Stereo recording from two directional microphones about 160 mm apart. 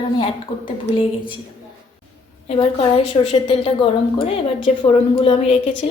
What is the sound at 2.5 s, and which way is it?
A woman's voice, 35° left (ahead or behind).